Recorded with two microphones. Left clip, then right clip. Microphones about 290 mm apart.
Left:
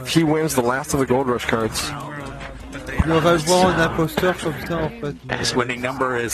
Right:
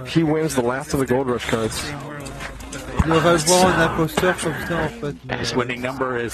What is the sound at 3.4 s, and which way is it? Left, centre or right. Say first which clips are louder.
Speech: right 1 dB; right.